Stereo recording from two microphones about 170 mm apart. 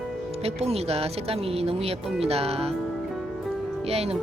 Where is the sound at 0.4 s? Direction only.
40° right (ahead or behind).